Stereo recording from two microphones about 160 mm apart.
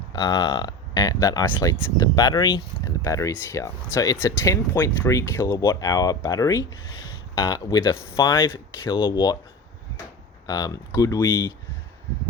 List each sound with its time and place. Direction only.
0.1 s speech: 25° left (ahead or behind)
10.4 s speech: 25° left (ahead or behind)